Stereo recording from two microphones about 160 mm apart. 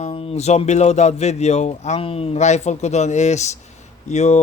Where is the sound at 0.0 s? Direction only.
35° left (ahead or behind).